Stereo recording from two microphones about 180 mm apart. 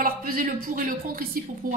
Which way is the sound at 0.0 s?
50° right (ahead or behind).